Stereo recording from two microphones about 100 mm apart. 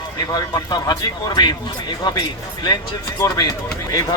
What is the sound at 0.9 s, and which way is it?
Speech, 45° left (ahead or behind).